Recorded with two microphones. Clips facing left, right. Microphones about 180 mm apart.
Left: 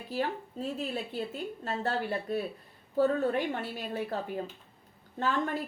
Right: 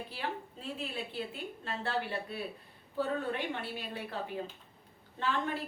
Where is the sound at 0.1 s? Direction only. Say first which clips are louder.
Left 7 dB; 40° left (ahead or behind).